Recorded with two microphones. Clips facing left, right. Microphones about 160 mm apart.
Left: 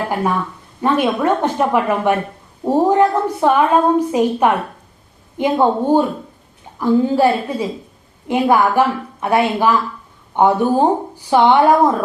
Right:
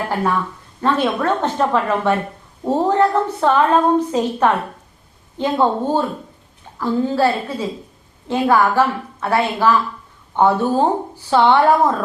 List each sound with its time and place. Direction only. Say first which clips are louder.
0.8 s a woman's voice: left 2 dB; 10° left (ahead or behind)